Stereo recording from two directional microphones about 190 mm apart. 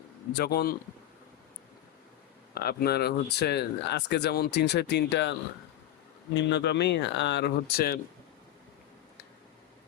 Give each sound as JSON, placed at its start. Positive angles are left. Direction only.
{"t": 0.3, "sound": "speech", "side_deg": 55}
{"t": 2.6, "sound": "speech", "side_deg": 55}
{"t": 6.3, "sound": "speech", "side_deg": 65}